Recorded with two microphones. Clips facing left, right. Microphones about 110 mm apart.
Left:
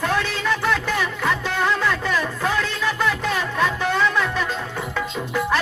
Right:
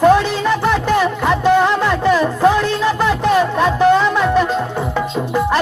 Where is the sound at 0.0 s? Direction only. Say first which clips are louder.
Right 11 dB; 20° right (ahead or behind).